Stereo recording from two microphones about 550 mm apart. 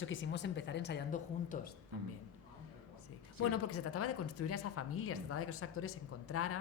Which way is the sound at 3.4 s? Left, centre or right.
Left.